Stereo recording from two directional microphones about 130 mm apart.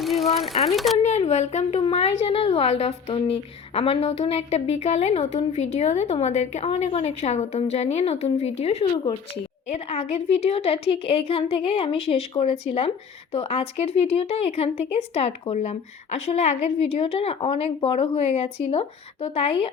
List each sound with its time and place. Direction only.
0.0 s sewing machine: centre (ahead or behind)
0.6 s speech: centre (ahead or behind)
0.9 s a woman's voice: 55° left (ahead or behind)